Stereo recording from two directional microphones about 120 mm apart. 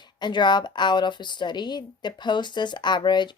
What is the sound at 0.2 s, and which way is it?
A woman's voice, 40° left (ahead or behind).